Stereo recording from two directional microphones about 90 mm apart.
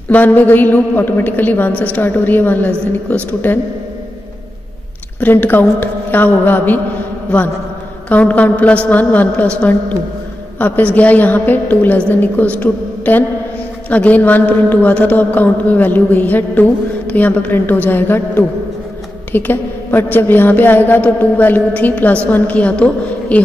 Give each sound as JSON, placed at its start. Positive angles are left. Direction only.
{"t": 0.1, "sound": "a woman's voice", "side_deg": 20}
{"t": 5.2, "sound": "a woman's voice", "side_deg": 20}
{"t": 8.1, "sound": "a woman's voice", "side_deg": 15}